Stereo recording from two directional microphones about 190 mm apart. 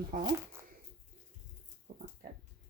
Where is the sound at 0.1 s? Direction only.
40° right (ahead or behind).